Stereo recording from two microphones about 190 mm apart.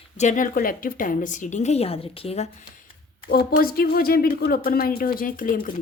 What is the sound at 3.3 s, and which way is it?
Speech, 50° left (ahead or behind).